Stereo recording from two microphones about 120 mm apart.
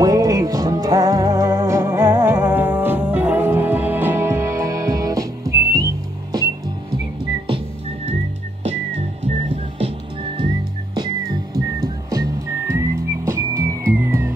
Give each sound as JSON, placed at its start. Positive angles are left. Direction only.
{"t": 0.0, "sound": "music", "side_deg": -30}
{"t": 2.5, "sound": "music", "side_deg": -15}
{"t": 7.4, "sound": "whistling", "side_deg": -55}
{"t": 9.8, "sound": "music", "side_deg": -50}
{"t": 11.5, "sound": "whistling", "side_deg": -30}